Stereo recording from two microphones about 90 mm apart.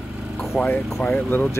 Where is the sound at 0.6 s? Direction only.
10° right (ahead or behind).